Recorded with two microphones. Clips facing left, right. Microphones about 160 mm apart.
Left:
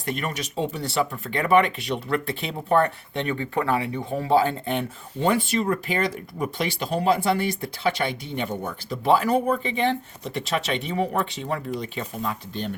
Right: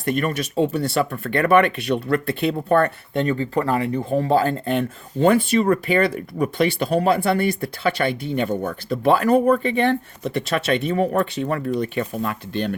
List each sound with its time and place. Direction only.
0.0 s speech: 50° right (ahead or behind)
3.2 s speech: 35° right (ahead or behind)
5.2 s speech: 60° right (ahead or behind)